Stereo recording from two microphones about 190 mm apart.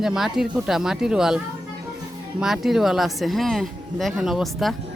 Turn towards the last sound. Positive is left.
turn(degrees=0)  # may be behind; listen again after turning